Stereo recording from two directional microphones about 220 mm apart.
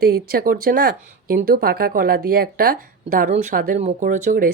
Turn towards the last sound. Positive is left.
turn(degrees=-35)  # may be behind; listen again after turning